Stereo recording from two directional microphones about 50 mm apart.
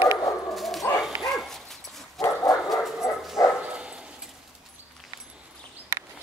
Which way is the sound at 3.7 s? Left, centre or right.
Right.